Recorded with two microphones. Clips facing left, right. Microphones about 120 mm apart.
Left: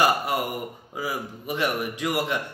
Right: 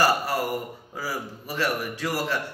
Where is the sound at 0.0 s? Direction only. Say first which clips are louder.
Even; 20° left (ahead or behind).